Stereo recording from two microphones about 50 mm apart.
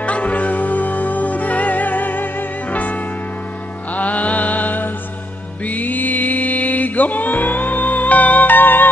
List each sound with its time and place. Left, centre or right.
0.0 s music: left
3.9 s mantra: left
5.7 s music: left